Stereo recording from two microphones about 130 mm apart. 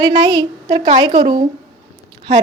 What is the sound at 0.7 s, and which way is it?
Speech, 55° right (ahead or behind).